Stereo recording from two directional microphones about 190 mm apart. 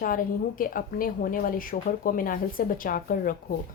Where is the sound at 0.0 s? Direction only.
45° left (ahead or behind).